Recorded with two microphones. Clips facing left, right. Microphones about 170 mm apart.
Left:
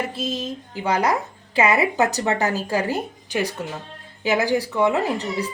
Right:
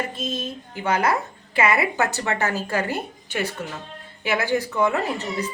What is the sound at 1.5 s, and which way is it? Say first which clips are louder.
Speech: left 2 dB; 15° left (ahead or behind).